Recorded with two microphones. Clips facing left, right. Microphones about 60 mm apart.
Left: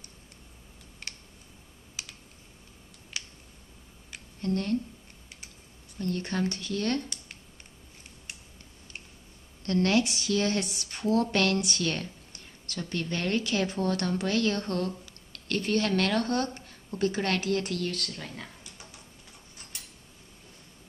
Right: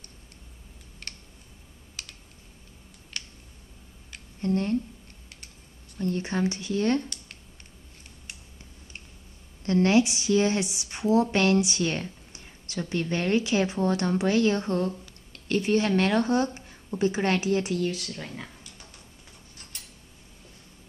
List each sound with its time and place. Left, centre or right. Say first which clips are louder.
3.1 s a sound: even; centre
4.4 s speech: right 3 dB; right
5.9 s speech: right 3 dB; centre
9.7 s speech: right 4 dB; centre